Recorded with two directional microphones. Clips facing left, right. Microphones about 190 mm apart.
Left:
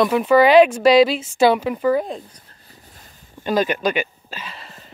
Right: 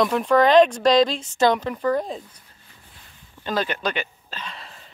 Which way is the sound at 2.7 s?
40° left (ahead or behind).